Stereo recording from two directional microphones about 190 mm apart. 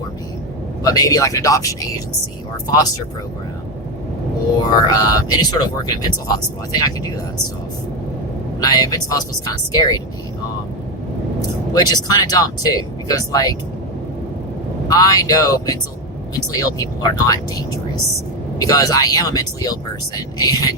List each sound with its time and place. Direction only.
0.9 s speech: 20° left (ahead or behind)
4.6 s speech: 20° left (ahead or behind)
8.6 s speech: 20° left (ahead or behind)
11.7 s speech: 20° left (ahead or behind)
14.8 s speech: 20° left (ahead or behind)
18.6 s speech: 20° left (ahead or behind)